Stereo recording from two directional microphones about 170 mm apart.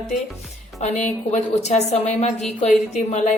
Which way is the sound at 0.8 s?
45° left (ahead or behind).